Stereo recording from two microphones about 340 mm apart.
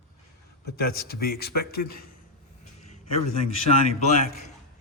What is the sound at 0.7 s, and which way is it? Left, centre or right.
Speech, left.